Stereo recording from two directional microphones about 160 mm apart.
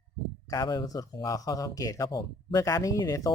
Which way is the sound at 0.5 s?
25° left (ahead or behind).